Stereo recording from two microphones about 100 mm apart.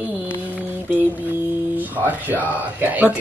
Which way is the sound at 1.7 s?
20° right (ahead or behind).